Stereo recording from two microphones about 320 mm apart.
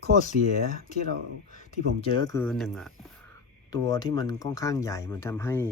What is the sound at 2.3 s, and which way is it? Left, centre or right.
Speech, centre.